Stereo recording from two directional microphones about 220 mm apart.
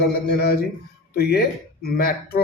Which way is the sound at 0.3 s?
45° left (ahead or behind).